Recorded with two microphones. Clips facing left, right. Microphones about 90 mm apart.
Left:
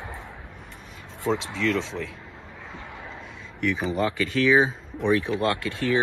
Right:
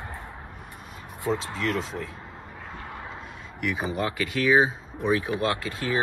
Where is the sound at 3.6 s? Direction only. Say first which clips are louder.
Left 3 dB; 10° right (ahead or behind).